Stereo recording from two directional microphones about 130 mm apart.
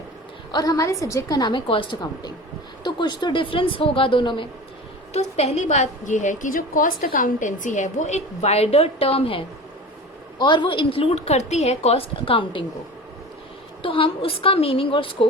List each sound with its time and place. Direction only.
0.5 s a woman's voice: 30° left (ahead or behind)
5.1 s a woman's voice: 55° left (ahead or behind)
13.8 s a woman's voice: 45° left (ahead or behind)